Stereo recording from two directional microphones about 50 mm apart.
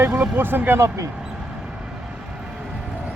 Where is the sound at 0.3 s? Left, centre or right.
Right.